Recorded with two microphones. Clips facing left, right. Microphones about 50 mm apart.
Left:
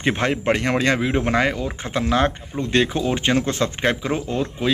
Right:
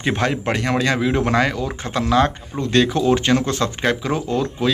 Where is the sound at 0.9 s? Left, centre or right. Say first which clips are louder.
Right 2 dB; left.